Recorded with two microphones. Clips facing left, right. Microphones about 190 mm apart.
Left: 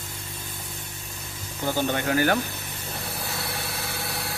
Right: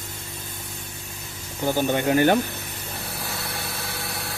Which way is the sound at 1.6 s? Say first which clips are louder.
Right 4 dB; 15° right (ahead or behind).